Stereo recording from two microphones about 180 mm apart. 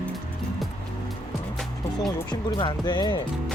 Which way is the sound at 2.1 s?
20° left (ahead or behind).